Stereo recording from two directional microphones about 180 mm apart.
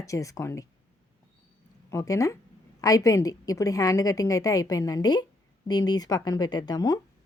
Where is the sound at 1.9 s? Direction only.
20° left (ahead or behind).